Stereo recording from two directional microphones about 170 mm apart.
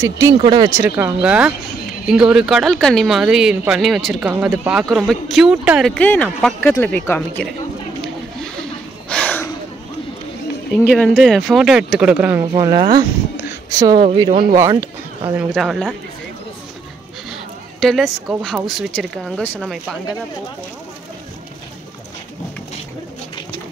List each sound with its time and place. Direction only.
0.2 s speech: 25° right (ahead or behind)
0.7 s speech: 15° right (ahead or behind)
5.9 s speech: 10° left (ahead or behind)
9.1 s a sound: 5° left (ahead or behind)
11.0 s speech: centre (ahead or behind)
12.5 s speech: 25° right (ahead or behind)
15.3 s speech: centre (ahead or behind)
17.3 s a sound: centre (ahead or behind)
18.4 s speech: centre (ahead or behind)